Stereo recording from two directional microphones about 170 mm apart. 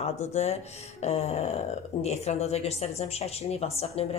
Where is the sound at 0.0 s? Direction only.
40° left (ahead or behind).